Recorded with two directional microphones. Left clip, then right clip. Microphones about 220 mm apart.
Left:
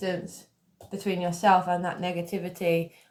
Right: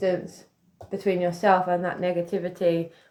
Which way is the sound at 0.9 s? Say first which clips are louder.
Right 5 dB; 15° left (ahead or behind).